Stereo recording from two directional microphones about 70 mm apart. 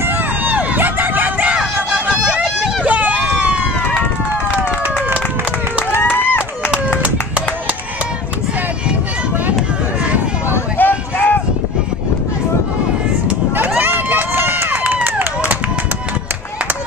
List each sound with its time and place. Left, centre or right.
0.0 s crowd: right
2.8 s run: right
5.9 s a sound: left
7.0 s music: centre
10.8 s a sound: left
13.7 s run: right